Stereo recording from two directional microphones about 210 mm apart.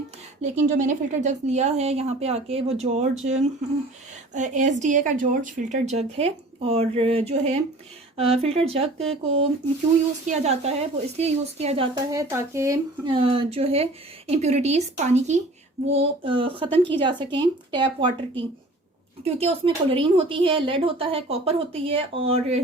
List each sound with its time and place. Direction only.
0.4 s speech: 35° right (ahead or behind)
10.2 s speech: 30° right (ahead or behind)
12.1 s speech: 15° right (ahead or behind); by 22.6 s 30° right (ahead or behind)